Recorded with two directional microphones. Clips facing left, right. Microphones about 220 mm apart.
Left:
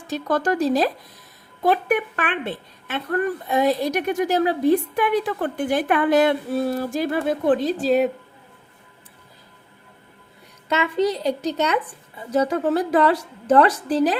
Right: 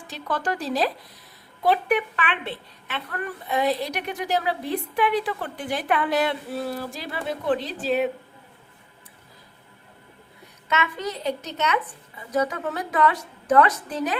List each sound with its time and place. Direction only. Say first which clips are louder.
0.1 s a woman's voice: left 7 dB; 40° left (ahead or behind)
10.7 s a woman's voice: left 7 dB; 30° left (ahead or behind)